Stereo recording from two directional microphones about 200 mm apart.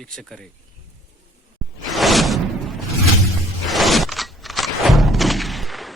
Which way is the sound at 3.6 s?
Centre (ahead or behind).